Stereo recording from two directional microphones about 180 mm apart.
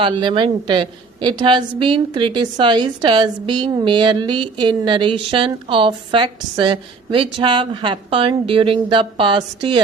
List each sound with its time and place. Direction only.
0.0 s a woman's voice: 25° right (ahead or behind)